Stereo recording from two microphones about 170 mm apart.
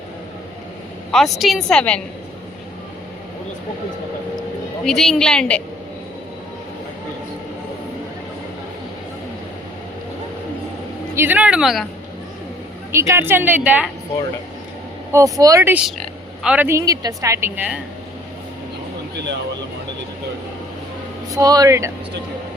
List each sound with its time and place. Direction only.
1.1 s a woman's voice: centre (ahead or behind)
4.9 s a woman's voice: centre (ahead or behind)
11.1 s a woman's voice: 10° right (ahead or behind)
12.9 s a woman's voice: 15° right (ahead or behind)
15.1 s a woman's voice: 20° right (ahead or behind)
21.3 s speech: 20° right (ahead or behind)